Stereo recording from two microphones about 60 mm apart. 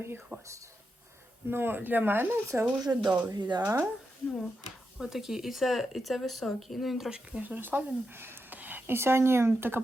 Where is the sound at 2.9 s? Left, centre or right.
Right.